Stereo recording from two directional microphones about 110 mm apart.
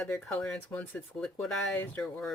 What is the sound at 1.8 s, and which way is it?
Speech, 15° left (ahead or behind).